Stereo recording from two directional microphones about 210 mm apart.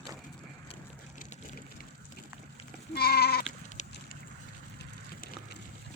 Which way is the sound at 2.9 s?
50° left (ahead or behind).